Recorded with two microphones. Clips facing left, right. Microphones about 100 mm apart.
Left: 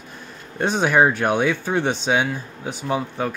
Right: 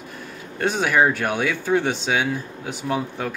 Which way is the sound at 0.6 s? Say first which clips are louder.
Left 2 dB; 20° left (ahead or behind).